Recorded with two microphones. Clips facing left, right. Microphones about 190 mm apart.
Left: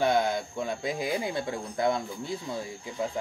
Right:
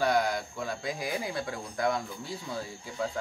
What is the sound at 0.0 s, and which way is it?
Speech, 25° left (ahead or behind).